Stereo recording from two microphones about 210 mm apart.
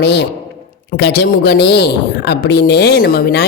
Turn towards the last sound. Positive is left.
turn(degrees=45)  # may be behind; listen again after turning